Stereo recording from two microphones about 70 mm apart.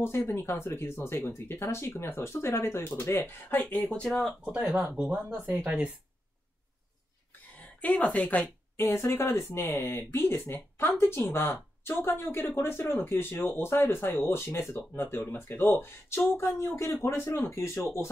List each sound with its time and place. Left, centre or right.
0.0 s speech: left
4.0 s speech: centre
4.9 s speech: right
7.8 s speech: left
8.7 s speech: left